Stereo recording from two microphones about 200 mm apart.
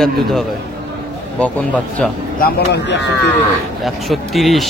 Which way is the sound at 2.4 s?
50° left (ahead or behind).